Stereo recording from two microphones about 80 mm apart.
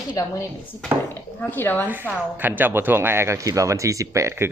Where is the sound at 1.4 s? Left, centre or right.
Left.